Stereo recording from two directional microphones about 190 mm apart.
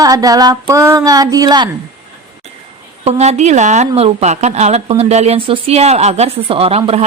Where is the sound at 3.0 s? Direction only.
35° right (ahead or behind).